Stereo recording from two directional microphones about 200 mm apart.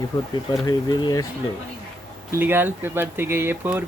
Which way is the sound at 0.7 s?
20° left (ahead or behind).